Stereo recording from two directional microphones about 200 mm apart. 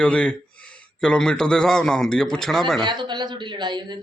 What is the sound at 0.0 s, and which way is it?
A man's voice, 5° left (ahead or behind).